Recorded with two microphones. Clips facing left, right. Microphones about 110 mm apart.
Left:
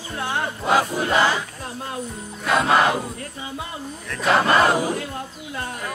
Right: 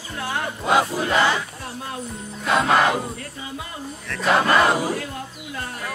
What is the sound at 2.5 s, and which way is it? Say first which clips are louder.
Crowd: even; centre (ahead or behind).